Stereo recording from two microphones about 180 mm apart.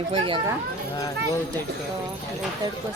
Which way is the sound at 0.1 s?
30° right (ahead or behind).